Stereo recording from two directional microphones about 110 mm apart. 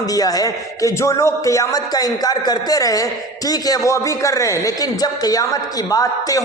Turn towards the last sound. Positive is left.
turn(degrees=30)  # may be behind; listen again after turning